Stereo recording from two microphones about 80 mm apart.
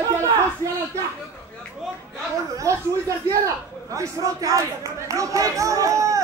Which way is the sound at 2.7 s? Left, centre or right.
Right.